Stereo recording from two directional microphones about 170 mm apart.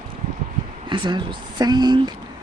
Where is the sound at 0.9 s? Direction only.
30° right (ahead or behind).